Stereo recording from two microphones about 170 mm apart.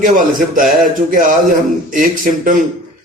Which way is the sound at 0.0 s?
50° right (ahead or behind).